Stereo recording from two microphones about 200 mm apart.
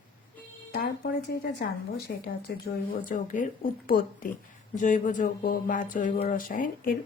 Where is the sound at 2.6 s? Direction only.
45° left (ahead or behind).